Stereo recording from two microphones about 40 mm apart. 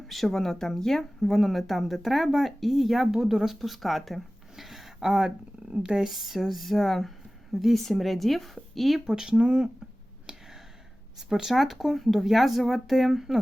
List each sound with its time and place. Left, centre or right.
0.1 s speech: centre
9.0 s speech: centre
10.3 s a sound: centre
11.3 s speech: centre